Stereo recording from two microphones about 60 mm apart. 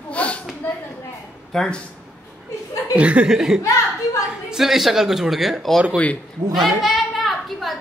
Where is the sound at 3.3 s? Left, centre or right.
Centre.